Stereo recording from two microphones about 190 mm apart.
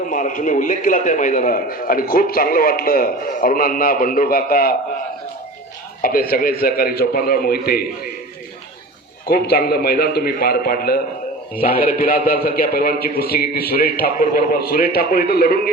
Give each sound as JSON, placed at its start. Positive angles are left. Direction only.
{"t": 0.1, "sound": "a man's voice", "side_deg": 45}
{"t": 6.0, "sound": "a man's voice", "side_deg": 50}
{"t": 9.2, "sound": "a man's voice", "side_deg": 55}